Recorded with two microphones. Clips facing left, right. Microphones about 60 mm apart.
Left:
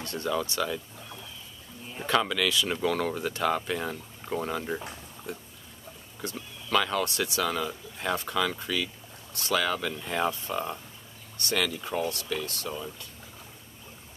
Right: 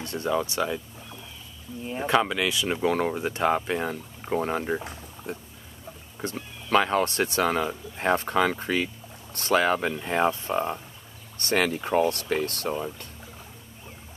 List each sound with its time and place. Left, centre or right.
0.0 s speech: right
1.9 s speech: right
11.3 s speech: right
12.7 s speech: right